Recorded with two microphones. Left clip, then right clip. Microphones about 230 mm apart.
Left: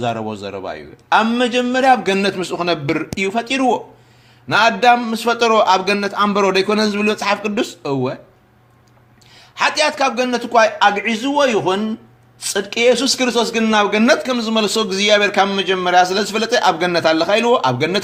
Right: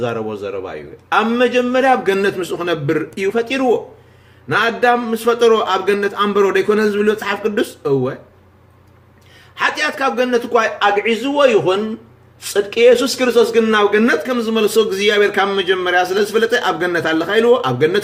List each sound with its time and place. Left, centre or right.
0.0 s speech: left
9.6 s speech: left